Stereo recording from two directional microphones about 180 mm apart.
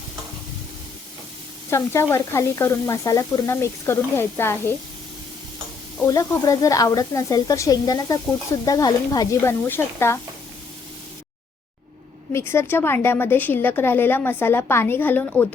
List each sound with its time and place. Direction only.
1.7 s a woman's voice: 15° left (ahead or behind)
6.1 s a woman's voice: 20° left (ahead or behind)
12.3 s a woman's voice: 15° left (ahead or behind)